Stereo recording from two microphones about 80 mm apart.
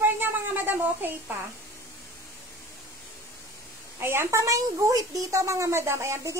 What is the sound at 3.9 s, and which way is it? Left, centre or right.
A woman's voice, right.